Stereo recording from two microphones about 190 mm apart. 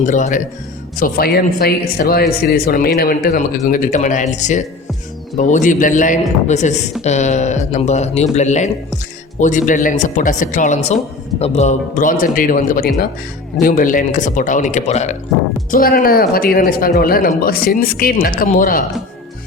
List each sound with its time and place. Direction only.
0.0 s speech: 40° left (ahead or behind)
15.7 s speech: 50° left (ahead or behind)